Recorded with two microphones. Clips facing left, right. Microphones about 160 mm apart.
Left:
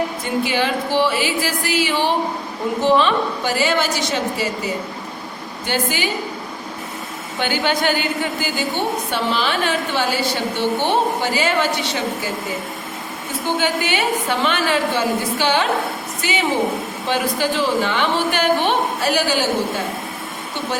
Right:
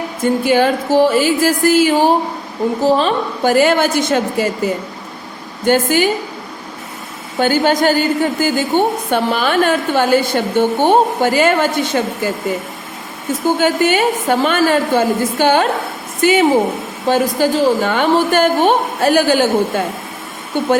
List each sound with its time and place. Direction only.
0.2 s a woman's voice: 45° right (ahead or behind)
7.3 s a woman's voice: 45° right (ahead or behind)
13.4 s a woman's voice: 45° right (ahead or behind)